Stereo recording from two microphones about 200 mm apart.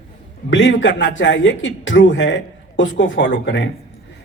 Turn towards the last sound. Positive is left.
turn(degrees=60)  # may be behind; listen again after turning